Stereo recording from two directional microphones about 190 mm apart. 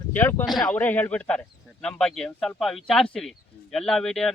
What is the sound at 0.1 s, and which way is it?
Speech, 10° left (ahead or behind).